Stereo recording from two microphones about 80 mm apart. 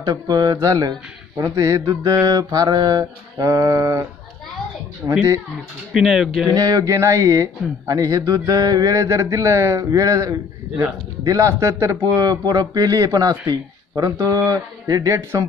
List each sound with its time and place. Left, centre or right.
0.0 s mantra: right
5.9 s speech: centre
6.5 s mantra: right
11.2 s speech: right
12.2 s mantra: right